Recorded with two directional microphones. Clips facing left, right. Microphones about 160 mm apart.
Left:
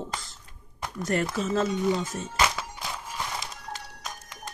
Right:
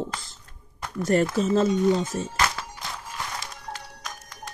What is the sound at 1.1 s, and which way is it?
Speech, 30° right (ahead or behind).